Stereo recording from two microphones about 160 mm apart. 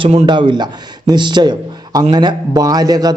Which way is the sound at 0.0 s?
35° right (ahead or behind).